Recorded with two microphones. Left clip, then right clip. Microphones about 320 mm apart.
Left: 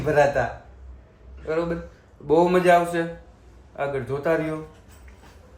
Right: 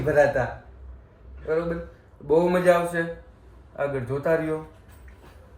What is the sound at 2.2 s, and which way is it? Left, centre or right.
A man's voice, centre.